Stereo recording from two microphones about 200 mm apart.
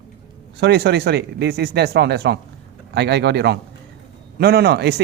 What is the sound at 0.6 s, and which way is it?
A man's voice, 55° right (ahead or behind).